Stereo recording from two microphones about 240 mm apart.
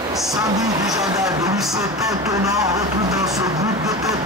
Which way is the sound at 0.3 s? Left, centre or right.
Centre.